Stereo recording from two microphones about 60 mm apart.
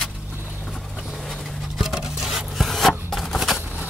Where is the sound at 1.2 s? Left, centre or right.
Centre.